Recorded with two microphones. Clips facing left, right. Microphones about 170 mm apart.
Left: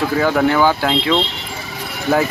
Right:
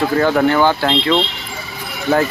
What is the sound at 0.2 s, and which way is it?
Speech, centre (ahead or behind).